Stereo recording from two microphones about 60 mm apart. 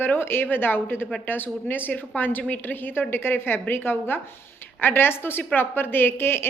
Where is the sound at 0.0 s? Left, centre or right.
Left.